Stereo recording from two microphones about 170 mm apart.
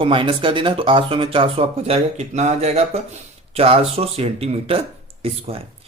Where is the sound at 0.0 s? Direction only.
30° right (ahead or behind).